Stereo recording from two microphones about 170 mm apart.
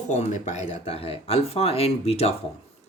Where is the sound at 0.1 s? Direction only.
45° left (ahead or behind).